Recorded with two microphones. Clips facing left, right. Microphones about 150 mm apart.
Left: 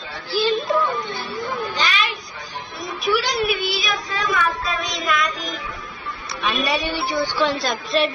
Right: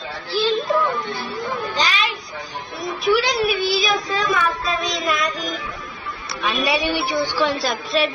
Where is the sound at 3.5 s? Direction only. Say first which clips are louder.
Right 3 dB; 35° right (ahead or behind).